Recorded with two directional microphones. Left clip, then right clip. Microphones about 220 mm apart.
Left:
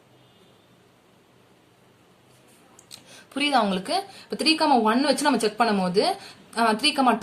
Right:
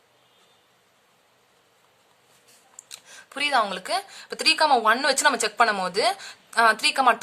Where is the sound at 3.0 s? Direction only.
35° right (ahead or behind).